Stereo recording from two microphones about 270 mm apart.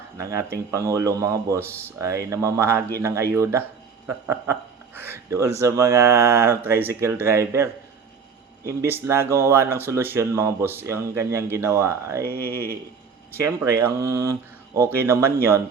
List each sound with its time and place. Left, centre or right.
0.2 s speech: centre
8.8 s speech: centre
12.2 s a sound: right
13.4 s speech: centre